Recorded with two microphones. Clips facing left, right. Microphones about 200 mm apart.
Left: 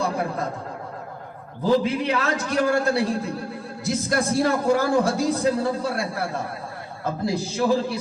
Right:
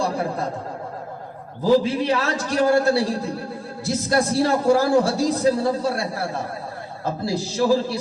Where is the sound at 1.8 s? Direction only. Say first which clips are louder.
Right 2 dB; 35° right (ahead or behind).